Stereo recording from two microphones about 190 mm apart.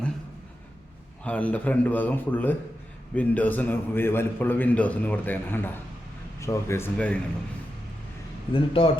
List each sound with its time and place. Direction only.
1.2 s a man's voice: 5° left (ahead or behind)
8.5 s speech: 30° left (ahead or behind)